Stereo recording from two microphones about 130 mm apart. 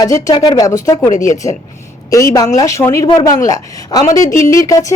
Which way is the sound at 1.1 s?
75° left (ahead or behind).